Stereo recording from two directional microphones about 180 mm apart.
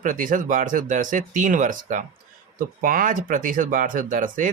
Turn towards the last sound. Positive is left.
turn(degrees=-45)  # may be behind; listen again after turning